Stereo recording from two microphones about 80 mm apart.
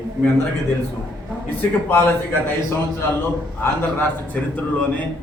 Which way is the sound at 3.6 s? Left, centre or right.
Left.